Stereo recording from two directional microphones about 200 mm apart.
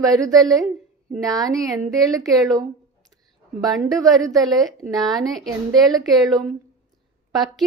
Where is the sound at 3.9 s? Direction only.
15° right (ahead or behind).